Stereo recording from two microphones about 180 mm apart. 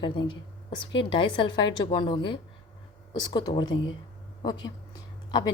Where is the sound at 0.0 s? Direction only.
25° left (ahead or behind).